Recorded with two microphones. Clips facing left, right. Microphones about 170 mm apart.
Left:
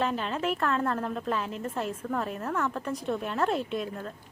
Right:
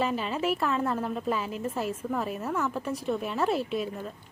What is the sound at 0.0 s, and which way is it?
A woman's voice, 5° right (ahead or behind).